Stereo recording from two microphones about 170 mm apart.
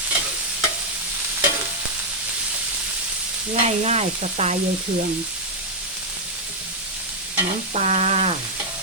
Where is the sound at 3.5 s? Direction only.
40° right (ahead or behind).